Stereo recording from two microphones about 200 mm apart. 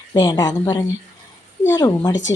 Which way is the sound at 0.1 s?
20° left (ahead or behind).